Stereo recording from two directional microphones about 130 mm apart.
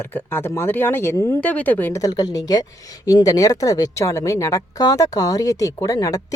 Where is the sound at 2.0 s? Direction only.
30° left (ahead or behind).